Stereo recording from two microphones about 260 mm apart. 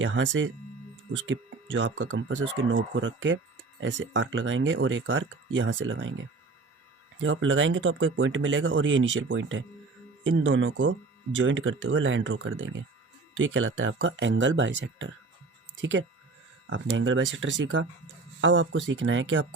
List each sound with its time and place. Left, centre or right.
0.0 s speech: right
7.2 s speech: right